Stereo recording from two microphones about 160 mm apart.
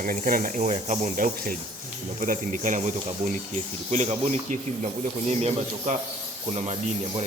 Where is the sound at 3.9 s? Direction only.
40° right (ahead or behind).